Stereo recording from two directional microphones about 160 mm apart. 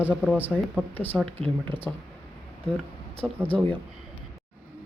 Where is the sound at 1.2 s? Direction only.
35° right (ahead or behind).